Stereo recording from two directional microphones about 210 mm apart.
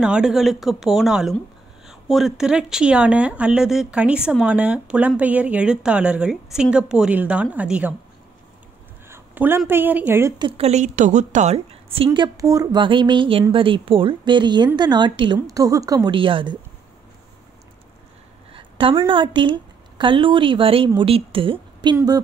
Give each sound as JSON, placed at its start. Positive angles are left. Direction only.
{"t": 0.0, "sound": "speech", "side_deg": -5}
{"t": 9.1, "sound": "a woman's voice", "side_deg": -10}
{"t": 10.4, "sound": "a woman's voice", "side_deg": -30}
{"t": 18.5, "sound": "a woman's voice", "side_deg": -25}